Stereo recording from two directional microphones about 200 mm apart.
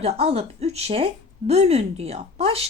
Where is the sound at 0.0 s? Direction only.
30° right (ahead or behind).